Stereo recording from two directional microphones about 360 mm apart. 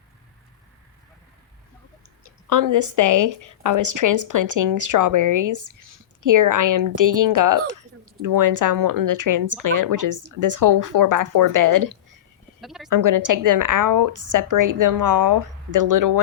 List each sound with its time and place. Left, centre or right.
2.2 s a woman's voice: right
12.6 s a woman's voice: centre
12.9 s a woman's voice: right